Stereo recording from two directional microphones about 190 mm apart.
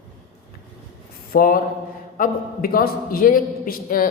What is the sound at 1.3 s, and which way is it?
A man's voice, 50° left (ahead or behind).